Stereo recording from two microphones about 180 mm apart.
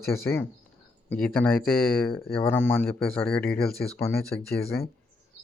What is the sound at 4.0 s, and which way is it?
Speech, 15° left (ahead or behind).